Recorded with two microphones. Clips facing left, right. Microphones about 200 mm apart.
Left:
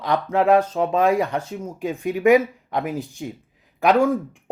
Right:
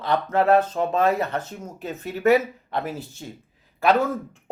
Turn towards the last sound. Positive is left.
turn(degrees=10)  # may be behind; listen again after turning